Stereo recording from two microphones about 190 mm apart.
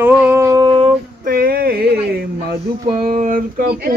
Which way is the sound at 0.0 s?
10° right (ahead or behind).